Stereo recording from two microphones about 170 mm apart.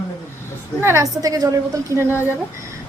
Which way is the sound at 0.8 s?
20° right (ahead or behind).